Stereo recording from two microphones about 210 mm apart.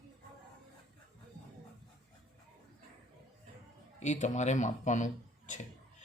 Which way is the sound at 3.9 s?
35° left (ahead or behind).